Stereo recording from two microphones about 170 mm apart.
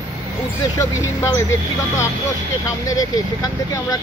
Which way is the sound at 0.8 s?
20° left (ahead or behind).